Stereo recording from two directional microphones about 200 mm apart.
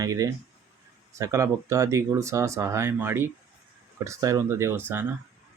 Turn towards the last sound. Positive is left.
turn(degrees=-10)  # may be behind; listen again after turning